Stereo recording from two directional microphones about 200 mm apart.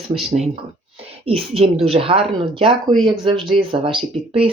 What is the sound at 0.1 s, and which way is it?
Speech, 30° right (ahead or behind).